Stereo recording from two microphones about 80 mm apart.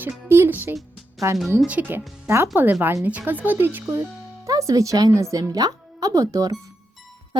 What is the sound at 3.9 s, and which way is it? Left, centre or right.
Speech, right.